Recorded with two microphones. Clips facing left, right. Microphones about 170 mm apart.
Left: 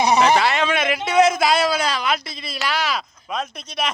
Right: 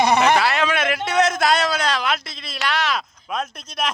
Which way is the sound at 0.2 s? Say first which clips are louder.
Left 1 dB; centre (ahead or behind).